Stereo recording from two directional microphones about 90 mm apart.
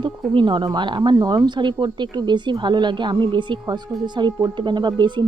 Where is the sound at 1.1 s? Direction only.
45° right (ahead or behind).